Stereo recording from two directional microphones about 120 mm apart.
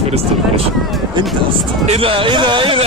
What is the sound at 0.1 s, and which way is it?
Speech, 55° right (ahead or behind).